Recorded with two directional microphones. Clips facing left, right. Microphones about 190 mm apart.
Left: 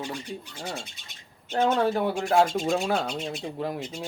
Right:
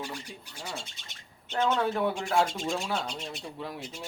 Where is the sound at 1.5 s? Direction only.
50° left (ahead or behind).